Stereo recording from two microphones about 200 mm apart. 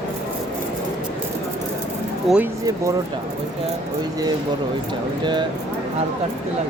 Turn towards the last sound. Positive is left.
turn(degrees=-20)  # may be behind; listen again after turning